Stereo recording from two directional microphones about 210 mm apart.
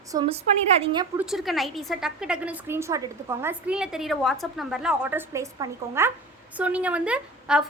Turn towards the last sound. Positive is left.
turn(degrees=-5)  # may be behind; listen again after turning